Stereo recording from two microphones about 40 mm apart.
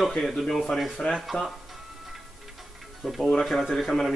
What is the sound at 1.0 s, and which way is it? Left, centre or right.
Speech, centre.